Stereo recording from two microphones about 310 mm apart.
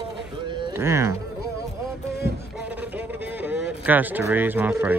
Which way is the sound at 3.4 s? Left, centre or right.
Centre.